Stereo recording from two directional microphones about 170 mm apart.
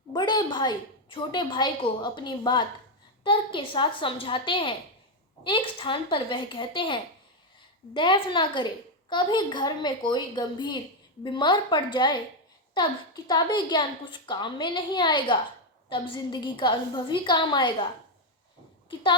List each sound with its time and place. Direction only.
0.1 s a woman's voice: 25° left (ahead or behind)